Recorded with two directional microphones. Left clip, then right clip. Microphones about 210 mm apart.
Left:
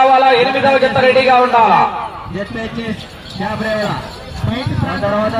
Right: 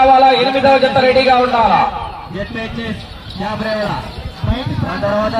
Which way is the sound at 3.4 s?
5° right (ahead or behind).